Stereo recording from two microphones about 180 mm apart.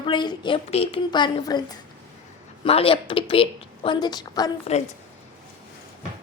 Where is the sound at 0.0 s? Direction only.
25° left (ahead or behind).